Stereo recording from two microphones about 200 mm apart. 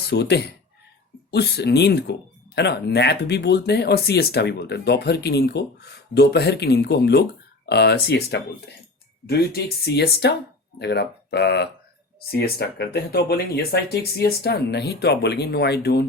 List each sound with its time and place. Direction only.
0.1 s speech: 55° left (ahead or behind)